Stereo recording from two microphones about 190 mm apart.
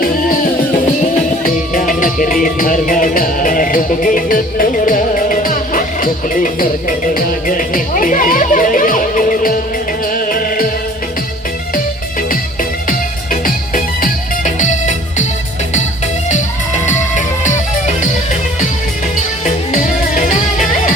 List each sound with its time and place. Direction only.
1.1 s music: 45° left (ahead or behind)
12.9 s music: 45° left (ahead or behind)
16.8 s music: 40° left (ahead or behind)
19.7 s music: 40° left (ahead or behind)